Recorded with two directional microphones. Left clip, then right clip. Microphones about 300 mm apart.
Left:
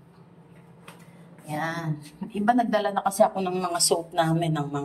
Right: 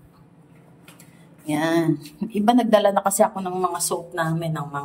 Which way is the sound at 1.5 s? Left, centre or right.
Right.